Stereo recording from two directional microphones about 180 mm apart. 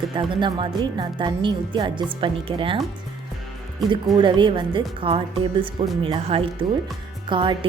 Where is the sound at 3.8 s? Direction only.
25° right (ahead or behind).